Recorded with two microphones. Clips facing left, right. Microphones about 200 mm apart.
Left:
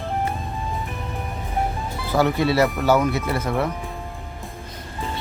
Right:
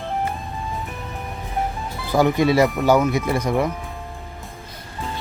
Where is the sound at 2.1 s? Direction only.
15° right (ahead or behind).